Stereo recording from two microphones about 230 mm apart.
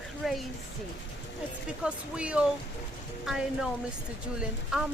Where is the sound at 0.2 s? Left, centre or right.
Centre.